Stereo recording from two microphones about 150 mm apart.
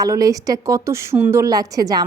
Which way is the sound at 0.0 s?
25° right (ahead or behind).